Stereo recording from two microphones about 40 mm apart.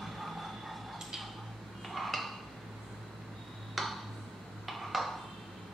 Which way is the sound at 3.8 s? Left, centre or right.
Centre.